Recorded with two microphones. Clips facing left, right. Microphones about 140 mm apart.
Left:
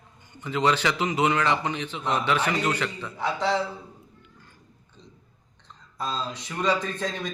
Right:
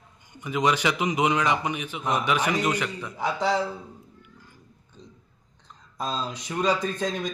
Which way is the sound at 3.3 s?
Centre (ahead or behind).